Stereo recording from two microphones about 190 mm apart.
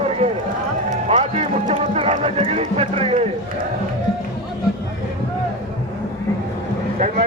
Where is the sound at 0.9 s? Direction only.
35° right (ahead or behind).